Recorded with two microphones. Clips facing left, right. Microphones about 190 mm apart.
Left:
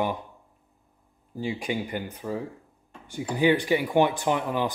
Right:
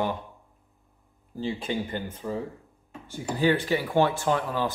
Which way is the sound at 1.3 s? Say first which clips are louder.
Even; 15° left (ahead or behind).